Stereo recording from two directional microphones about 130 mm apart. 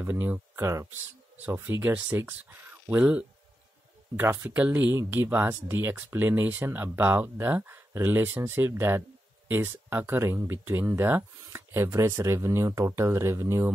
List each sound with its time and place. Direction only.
0.0 s speech: 15° right (ahead or behind)